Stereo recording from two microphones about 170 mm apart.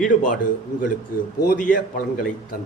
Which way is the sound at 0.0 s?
50° left (ahead or behind).